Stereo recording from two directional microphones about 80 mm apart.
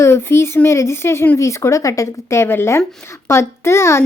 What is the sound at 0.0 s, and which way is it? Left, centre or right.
A woman's voice, left.